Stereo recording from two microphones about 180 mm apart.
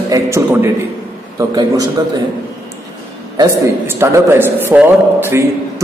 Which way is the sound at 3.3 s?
15° right (ahead or behind).